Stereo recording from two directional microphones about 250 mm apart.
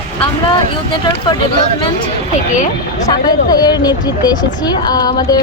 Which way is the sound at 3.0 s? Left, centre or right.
Centre.